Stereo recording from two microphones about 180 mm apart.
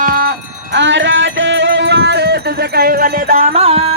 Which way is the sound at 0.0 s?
60° right (ahead or behind).